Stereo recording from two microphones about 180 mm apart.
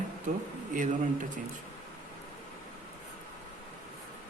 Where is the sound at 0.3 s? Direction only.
45° right (ahead or behind).